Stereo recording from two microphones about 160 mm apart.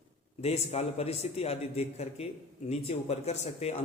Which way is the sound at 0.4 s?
40° left (ahead or behind).